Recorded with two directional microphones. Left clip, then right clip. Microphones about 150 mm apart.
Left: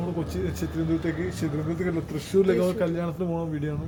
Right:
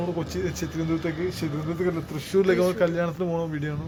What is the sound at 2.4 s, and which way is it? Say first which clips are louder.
Speech: right 2 dB; 5° right (ahead or behind).